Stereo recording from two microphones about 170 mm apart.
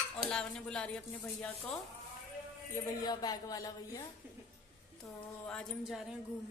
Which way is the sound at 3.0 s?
20° left (ahead or behind).